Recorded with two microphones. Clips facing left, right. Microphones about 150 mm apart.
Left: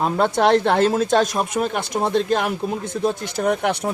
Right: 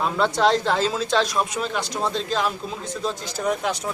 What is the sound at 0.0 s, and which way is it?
A man's voice, 50° left (ahead or behind).